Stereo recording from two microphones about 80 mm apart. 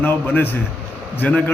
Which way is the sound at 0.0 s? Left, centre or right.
Left.